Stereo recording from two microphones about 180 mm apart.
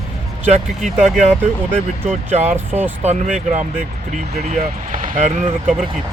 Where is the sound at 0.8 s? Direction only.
Centre (ahead or behind).